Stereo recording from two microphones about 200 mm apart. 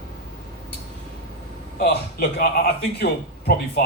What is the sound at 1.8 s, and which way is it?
A man's voice, 50° left (ahead or behind).